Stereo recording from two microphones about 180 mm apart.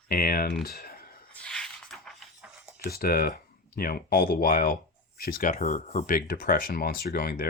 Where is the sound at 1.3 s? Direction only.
5° left (ahead or behind).